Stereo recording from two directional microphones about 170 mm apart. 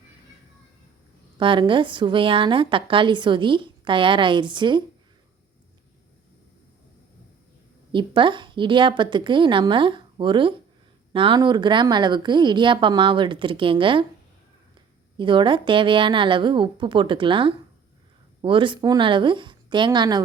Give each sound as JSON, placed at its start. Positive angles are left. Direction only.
{"t": 1.4, "sound": "a woman's voice", "side_deg": -30}
{"t": 7.9, "sound": "a woman's voice", "side_deg": -30}
{"t": 15.2, "sound": "a woman's voice", "side_deg": -30}